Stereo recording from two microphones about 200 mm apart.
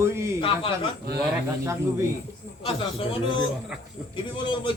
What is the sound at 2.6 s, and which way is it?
Speech, 25° left (ahead or behind).